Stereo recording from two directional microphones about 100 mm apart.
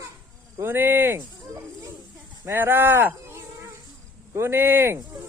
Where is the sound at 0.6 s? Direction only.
20° right (ahead or behind).